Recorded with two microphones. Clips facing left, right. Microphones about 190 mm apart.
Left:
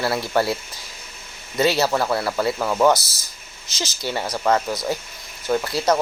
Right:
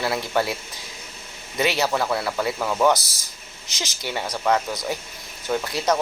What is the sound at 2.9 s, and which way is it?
Speech, 15° right (ahead or behind).